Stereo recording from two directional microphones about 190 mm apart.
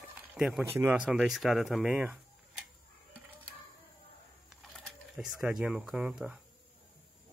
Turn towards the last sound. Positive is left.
turn(degrees=-5)  # may be behind; listen again after turning